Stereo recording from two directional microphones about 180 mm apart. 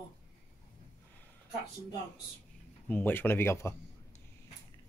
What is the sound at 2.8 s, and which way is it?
Speech, 10° left (ahead or behind).